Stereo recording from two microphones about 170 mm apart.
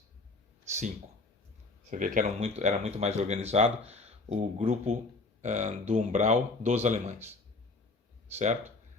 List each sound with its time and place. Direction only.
1.9 s speech: 50° right (ahead or behind)